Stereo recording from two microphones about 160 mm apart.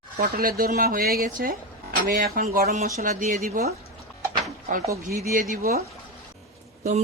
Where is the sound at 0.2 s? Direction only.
65° right (ahead or behind).